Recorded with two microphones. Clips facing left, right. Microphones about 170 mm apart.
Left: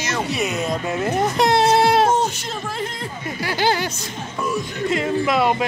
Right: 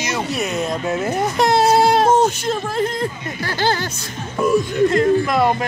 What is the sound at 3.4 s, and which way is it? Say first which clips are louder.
Speech: even; 10° left (ahead or behind).